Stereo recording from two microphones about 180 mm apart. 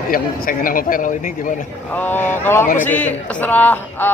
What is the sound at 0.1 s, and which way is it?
A man's voice, 50° left (ahead or behind).